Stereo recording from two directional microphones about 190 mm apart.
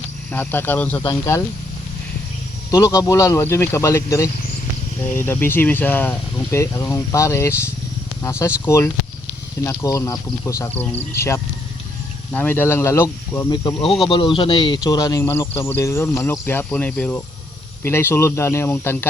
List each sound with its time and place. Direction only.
0.3 s speech: 10° left (ahead or behind)
2.6 s speech: 20° left (ahead or behind)
12.3 s speech: 10° left (ahead or behind)
13.8 s speech: centre (ahead or behind)
14.1 s speech: 25° left (ahead or behind)